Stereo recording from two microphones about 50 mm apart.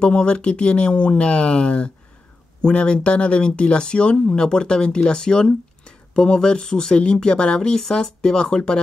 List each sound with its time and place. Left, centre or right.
0.0 s speech: centre